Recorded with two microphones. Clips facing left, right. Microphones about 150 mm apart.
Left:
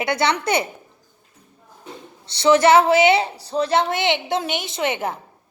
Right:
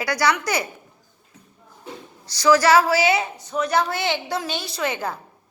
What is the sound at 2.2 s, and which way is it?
A woman's voice, 25° left (ahead or behind).